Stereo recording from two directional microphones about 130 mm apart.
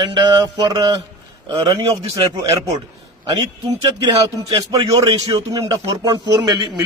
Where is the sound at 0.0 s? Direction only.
35° right (ahead or behind).